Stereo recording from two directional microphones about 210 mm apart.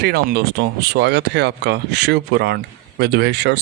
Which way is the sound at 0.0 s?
45° right (ahead or behind).